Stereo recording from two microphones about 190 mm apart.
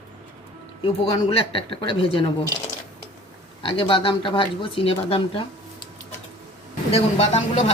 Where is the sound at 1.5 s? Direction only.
25° left (ahead or behind).